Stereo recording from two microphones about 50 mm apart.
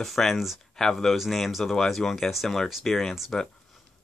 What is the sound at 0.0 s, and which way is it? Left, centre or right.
Speech, centre.